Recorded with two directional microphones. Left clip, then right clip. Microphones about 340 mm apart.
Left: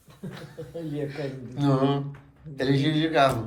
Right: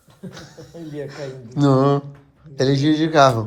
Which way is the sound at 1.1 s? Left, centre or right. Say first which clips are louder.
Right 4 dB; centre.